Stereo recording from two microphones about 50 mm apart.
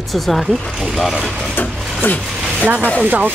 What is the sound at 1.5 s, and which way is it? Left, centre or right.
Drawer open or close, left.